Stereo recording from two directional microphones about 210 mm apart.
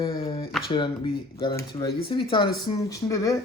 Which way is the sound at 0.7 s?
20° left (ahead or behind).